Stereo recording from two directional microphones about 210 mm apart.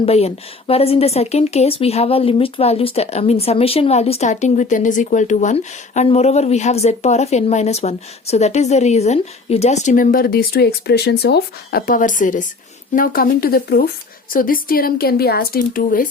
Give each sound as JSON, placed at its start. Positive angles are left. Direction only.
{"t": 0.0, "sound": "speech", "side_deg": 30}